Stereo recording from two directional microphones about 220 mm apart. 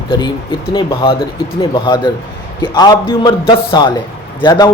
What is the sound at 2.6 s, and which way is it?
A man's voice, 20° left (ahead or behind).